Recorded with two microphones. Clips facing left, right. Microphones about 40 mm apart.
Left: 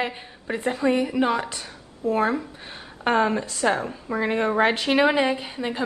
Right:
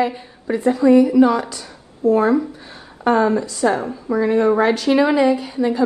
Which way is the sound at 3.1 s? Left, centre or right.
Left.